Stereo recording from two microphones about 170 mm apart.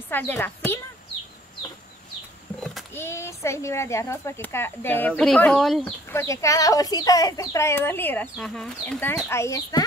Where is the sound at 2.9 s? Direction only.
15° left (ahead or behind).